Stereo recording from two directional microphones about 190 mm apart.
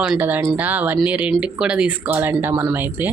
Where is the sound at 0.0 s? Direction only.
5° right (ahead or behind).